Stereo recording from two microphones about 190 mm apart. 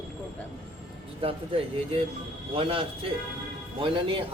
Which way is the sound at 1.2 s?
30° right (ahead or behind).